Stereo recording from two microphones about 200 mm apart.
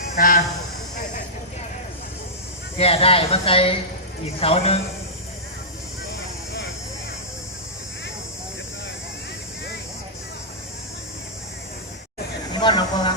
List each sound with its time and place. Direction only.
0.2 s speech: 45° left (ahead or behind)
2.7 s speech: 30° left (ahead or behind)
12.5 s snake: 20° left (ahead or behind)